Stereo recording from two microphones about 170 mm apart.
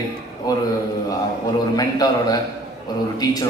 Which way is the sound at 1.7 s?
20° left (ahead or behind).